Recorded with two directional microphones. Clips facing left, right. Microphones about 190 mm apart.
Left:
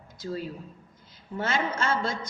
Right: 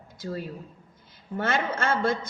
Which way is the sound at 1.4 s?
55° right (ahead or behind).